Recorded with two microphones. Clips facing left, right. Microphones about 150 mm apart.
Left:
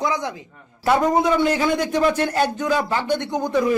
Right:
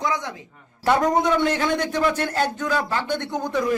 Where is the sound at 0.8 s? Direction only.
5° left (ahead or behind).